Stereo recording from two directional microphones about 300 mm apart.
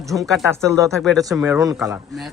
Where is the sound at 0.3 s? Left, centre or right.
Centre.